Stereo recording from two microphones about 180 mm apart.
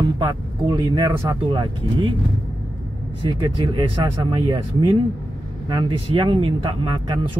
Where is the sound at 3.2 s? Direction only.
25° right (ahead or behind).